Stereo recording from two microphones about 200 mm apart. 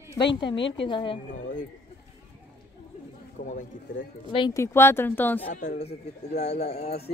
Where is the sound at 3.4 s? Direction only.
40° left (ahead or behind).